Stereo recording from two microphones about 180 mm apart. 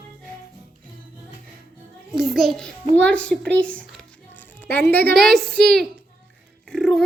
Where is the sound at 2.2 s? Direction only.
Centre (ahead or behind).